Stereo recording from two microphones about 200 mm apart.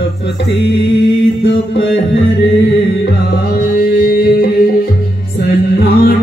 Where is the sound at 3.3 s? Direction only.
50° left (ahead or behind).